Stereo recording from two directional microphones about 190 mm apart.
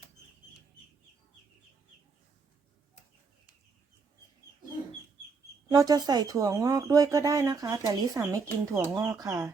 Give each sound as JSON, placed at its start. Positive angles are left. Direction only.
{"t": 5.6, "sound": "speech", "side_deg": -20}